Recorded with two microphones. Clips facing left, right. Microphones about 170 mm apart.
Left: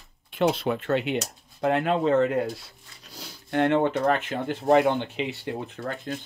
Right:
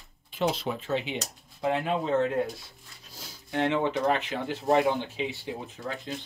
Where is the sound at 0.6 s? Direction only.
65° left (ahead or behind).